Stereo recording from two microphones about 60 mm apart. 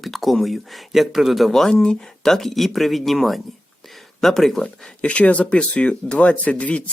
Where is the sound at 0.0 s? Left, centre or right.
Centre.